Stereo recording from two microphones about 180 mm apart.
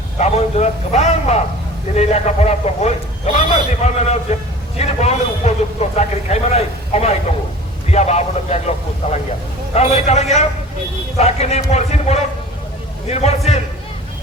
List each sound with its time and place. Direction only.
0.2 s a man's voice: 35° left (ahead or behind)